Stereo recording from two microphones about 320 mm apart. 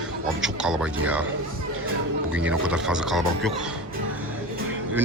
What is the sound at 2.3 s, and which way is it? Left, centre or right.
A man's voice, centre.